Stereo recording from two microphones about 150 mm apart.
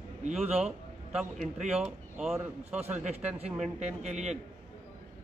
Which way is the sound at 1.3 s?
55° right (ahead or behind).